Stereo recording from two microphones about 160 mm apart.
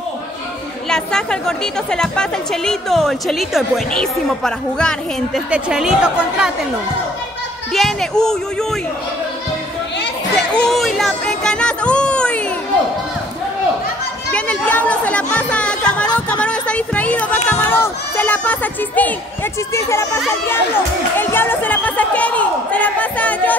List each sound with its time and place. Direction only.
0.8 s a woman's voice: 5° left (ahead or behind)
7.7 s a woman's voice: centre (ahead or behind)
10.3 s music: 5° left (ahead or behind)
14.3 s chatter: 10° left (ahead or behind)
16.3 s music: 5° left (ahead or behind)
17.5 s a woman's voice: 15° left (ahead or behind)
21.2 s a woman's voice: 15° left (ahead or behind)